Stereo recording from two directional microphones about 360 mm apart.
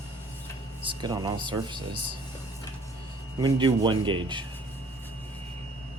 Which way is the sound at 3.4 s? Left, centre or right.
Centre.